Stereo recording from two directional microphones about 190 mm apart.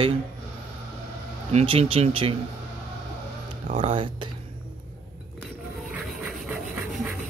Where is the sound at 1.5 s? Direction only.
30° right (ahead or behind).